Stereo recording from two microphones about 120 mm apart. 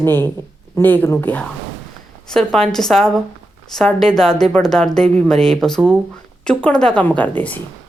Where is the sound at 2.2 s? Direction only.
5° left (ahead or behind).